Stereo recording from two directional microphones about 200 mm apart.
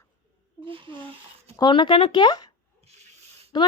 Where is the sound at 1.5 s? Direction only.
25° left (ahead or behind).